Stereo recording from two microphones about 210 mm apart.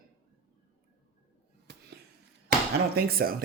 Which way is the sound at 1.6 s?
50° right (ahead or behind).